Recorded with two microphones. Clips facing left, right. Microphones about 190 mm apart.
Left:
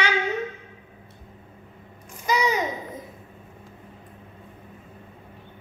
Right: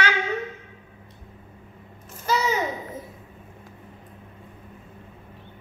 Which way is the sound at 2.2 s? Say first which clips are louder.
Left 1 dB; 15° left (ahead or behind).